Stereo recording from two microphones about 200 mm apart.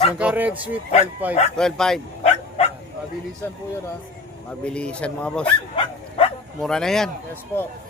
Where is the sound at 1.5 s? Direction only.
5° left (ahead or behind).